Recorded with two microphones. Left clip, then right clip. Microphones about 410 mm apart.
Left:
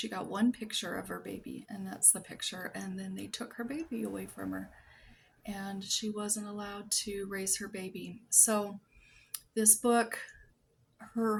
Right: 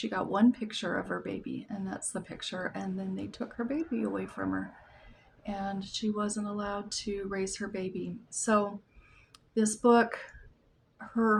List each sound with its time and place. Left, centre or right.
0.0 s a woman's voice: left